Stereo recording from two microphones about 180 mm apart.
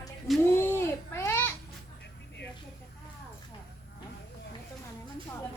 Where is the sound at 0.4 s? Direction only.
15° left (ahead or behind).